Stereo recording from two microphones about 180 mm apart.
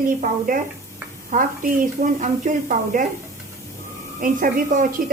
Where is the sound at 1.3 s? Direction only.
50° right (ahead or behind).